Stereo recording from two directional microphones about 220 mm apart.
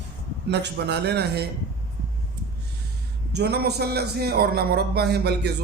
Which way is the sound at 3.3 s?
50° right (ahead or behind).